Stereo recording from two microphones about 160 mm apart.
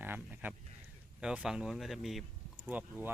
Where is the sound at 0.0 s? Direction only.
10° right (ahead or behind).